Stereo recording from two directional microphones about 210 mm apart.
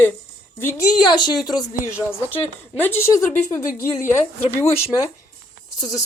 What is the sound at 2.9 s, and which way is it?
Speech, 10° left (ahead or behind).